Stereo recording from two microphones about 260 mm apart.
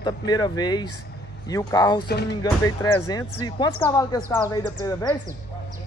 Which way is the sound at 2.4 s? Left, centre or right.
Centre.